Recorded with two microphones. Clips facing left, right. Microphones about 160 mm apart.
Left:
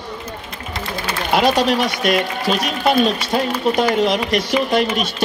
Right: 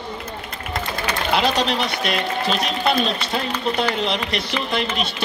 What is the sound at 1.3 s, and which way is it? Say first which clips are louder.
Speech: left 5 dB; 45° left (ahead or behind).